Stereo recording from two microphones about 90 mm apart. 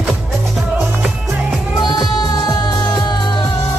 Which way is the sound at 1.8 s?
50° left (ahead or behind).